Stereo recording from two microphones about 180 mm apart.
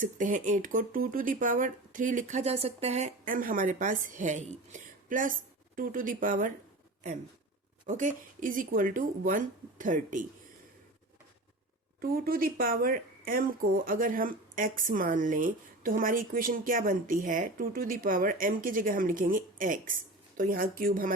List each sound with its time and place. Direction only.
0.0 s speech: 45° right (ahead or behind)
7.9 s speech: 45° right (ahead or behind)
11.9 s a woman's voice: 55° right (ahead or behind)